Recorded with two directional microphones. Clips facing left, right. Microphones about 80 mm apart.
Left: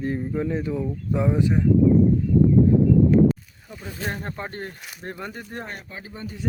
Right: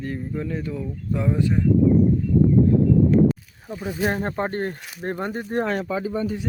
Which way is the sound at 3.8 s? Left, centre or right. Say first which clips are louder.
Right 9 dB; centre.